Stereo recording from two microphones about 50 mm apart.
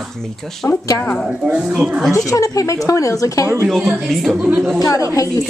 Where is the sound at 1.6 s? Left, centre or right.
Centre.